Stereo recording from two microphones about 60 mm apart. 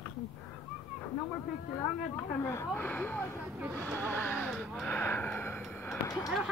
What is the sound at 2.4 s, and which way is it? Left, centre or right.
Speech, left.